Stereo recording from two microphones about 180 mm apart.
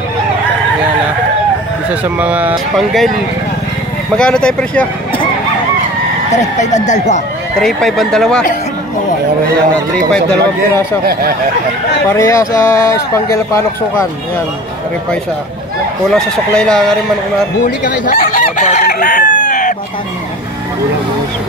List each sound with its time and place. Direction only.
2.1 s speech: 10° right (ahead or behind)
4.2 s speech: 5° left (ahead or behind)
6.3 s speech: 40° left (ahead or behind)
7.6 s speech: centre (ahead or behind)
11.1 s speech: 55° right (ahead or behind)
12.1 s speech: 15° left (ahead or behind)
16.1 s speech: 5° left (ahead or behind)
17.8 s chicken: 50° left (ahead or behind)